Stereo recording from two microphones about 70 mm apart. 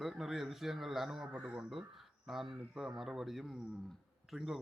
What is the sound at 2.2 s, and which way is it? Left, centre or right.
Speech, centre.